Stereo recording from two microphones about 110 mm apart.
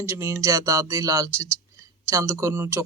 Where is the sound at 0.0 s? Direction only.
25° right (ahead or behind).